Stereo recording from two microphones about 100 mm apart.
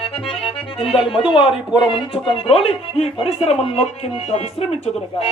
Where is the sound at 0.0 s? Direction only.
65° left (ahead or behind).